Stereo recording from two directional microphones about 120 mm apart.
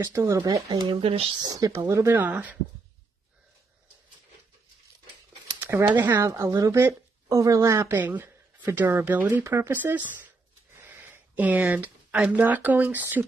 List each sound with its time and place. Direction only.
0.0 s speech: 25° right (ahead or behind)
0.6 s speech: 35° right (ahead or behind)
1.5 s speech: 30° right (ahead or behind); by 2.5 s 15° right (ahead or behind)
5.6 s a sound: 15° right (ahead or behind)
5.9 s speech: 20° right (ahead or behind)
7.9 s speech: 15° right (ahead or behind)